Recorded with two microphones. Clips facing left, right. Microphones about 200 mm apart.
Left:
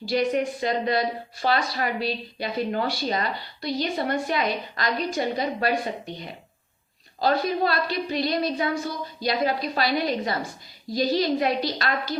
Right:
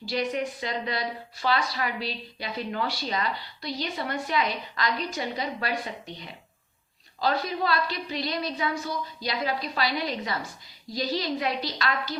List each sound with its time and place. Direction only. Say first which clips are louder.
0.1 s a woman's voice: left 5 dB; 50° left (ahead or behind)